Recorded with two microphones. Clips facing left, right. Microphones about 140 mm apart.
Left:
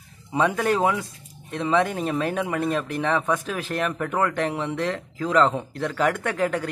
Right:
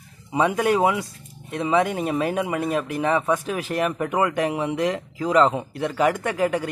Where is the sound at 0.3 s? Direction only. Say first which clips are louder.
Right 2 dB; 10° right (ahead or behind).